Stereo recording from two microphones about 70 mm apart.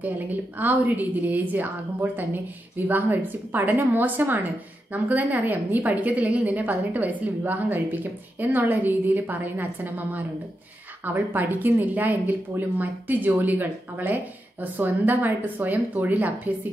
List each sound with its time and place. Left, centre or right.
0.0 s speech: right
2.9 s speech: right